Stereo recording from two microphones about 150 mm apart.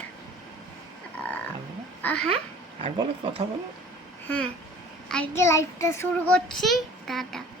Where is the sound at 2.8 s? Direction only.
35° right (ahead or behind).